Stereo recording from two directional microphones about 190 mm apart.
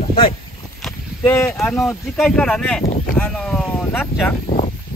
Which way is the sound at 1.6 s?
Centre (ahead or behind).